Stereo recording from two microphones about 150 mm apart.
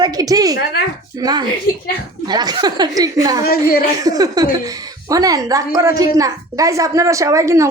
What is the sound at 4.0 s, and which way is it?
A woman's voice, 25° right (ahead or behind).